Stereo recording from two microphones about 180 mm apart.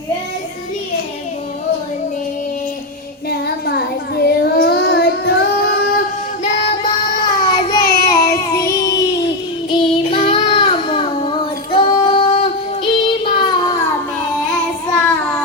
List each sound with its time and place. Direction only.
3.2 s child singing: 60° left (ahead or behind)
7.0 s child singing: 25° left (ahead or behind)